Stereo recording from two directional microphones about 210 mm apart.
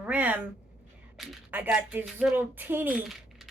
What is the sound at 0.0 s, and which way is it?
A woman's voice, 5° right (ahead or behind).